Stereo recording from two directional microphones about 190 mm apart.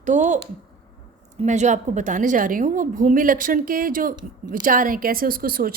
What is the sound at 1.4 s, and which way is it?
A woman's voice, 40° right (ahead or behind).